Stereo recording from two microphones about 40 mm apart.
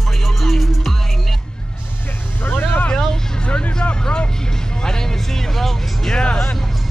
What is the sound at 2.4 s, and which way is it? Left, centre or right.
Vehicle, left.